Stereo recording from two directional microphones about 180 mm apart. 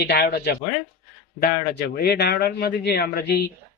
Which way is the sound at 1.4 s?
60° left (ahead or behind).